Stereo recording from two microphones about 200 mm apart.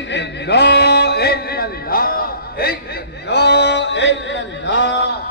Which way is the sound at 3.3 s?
60° left (ahead or behind).